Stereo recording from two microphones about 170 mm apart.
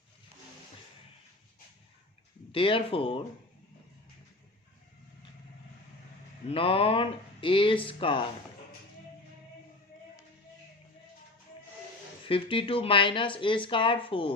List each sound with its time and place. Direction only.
2.5 s speech: 30° left (ahead or behind)
6.5 s speech: 35° left (ahead or behind)
12.3 s speech: 30° left (ahead or behind)